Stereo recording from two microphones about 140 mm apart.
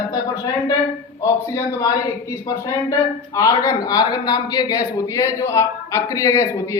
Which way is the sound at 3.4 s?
25° left (ahead or behind).